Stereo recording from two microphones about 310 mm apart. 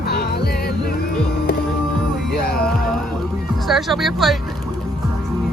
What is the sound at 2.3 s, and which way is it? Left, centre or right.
Music, left.